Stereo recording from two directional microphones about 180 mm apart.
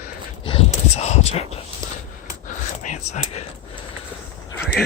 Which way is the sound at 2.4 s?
45° left (ahead or behind).